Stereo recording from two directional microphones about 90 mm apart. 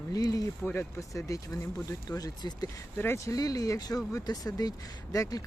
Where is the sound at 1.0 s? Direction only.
35° left (ahead or behind).